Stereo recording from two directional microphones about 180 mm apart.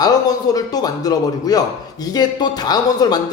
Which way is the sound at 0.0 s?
20° left (ahead or behind).